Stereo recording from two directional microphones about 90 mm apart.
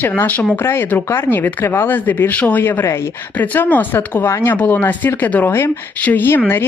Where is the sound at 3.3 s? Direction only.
20° left (ahead or behind).